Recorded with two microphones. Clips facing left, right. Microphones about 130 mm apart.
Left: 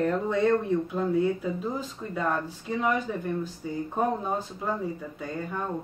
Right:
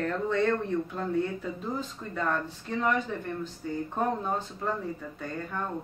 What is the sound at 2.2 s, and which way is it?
Speech, 10° left (ahead or behind).